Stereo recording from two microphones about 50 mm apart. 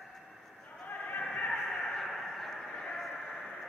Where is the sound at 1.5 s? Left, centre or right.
Centre.